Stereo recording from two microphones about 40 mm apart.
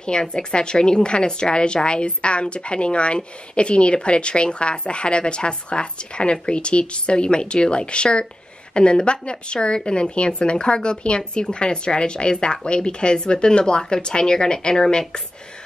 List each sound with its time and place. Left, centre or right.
0.0 s a woman's voice: left